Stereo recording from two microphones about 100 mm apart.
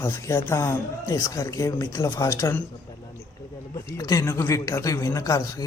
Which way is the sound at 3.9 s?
35° left (ahead or behind).